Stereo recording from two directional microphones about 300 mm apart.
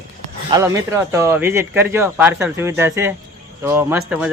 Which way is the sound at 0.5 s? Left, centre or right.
Centre.